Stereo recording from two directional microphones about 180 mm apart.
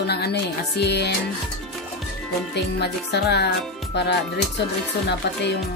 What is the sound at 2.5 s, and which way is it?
Speech, 70° left (ahead or behind).